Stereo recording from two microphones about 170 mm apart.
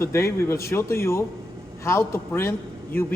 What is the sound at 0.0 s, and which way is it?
A man's voice, 15° left (ahead or behind).